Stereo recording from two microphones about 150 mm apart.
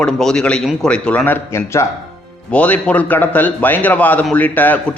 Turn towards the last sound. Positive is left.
turn(degrees=10)  # may be behind; listen again after turning